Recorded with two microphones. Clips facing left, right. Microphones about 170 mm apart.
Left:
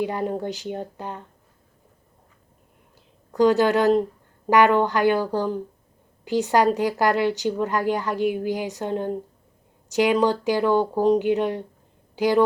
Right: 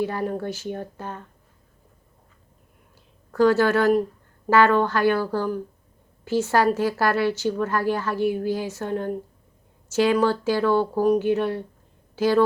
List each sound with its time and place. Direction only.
0.0 s speech: 15° left (ahead or behind)
3.3 s speech: 15° left (ahead or behind)